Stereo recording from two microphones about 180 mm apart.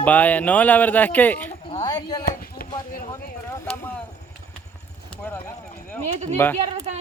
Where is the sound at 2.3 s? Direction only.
50° left (ahead or behind).